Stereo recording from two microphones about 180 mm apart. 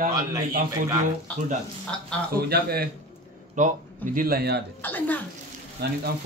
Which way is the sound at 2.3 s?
60° right (ahead or behind).